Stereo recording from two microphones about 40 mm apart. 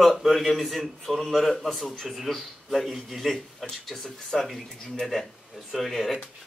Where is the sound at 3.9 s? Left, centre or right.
Centre.